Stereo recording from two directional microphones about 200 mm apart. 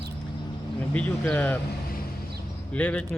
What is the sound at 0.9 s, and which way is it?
Speech, 5° left (ahead or behind).